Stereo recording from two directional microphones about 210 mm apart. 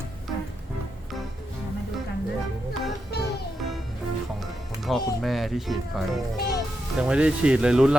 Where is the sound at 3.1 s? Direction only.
50° left (ahead or behind).